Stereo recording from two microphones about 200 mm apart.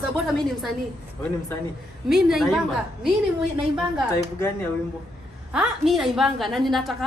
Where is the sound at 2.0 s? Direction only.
Centre (ahead or behind).